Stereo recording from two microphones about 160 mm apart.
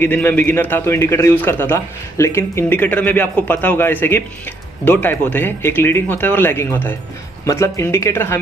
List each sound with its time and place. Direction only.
0.0 s a man's voice: 10° left (ahead or behind)